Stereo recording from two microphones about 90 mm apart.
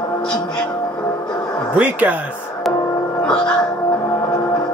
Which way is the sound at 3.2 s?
10° left (ahead or behind).